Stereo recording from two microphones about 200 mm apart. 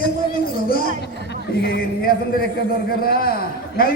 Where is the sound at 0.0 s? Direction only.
50° left (ahead or behind).